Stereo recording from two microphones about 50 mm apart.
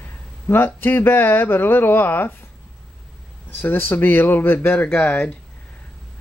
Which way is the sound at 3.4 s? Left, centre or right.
Left.